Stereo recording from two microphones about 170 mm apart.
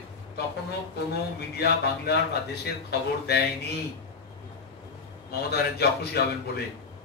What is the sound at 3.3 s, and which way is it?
Speech, 70° left (ahead or behind).